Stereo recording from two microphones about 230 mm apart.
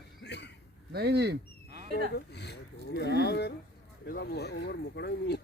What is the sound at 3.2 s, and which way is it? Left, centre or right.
Speech, left.